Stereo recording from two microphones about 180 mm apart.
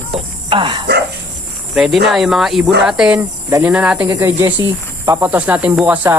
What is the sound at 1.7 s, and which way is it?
A man's voice, centre (ahead or behind).